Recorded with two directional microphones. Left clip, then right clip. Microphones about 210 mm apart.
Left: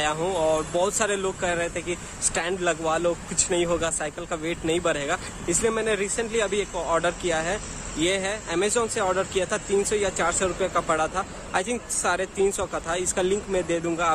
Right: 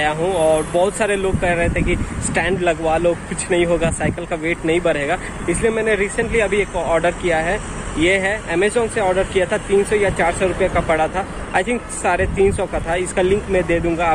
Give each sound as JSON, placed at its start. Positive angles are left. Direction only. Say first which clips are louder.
{"t": 0.0, "sound": "speech", "louder": "right 7 dB", "side_deg": 25}